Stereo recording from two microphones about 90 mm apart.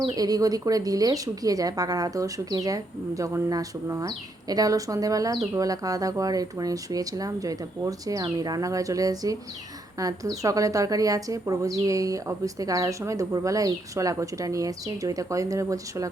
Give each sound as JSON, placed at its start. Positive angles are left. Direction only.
{"t": 0.2, "sound": "a woman's voice", "side_deg": -45}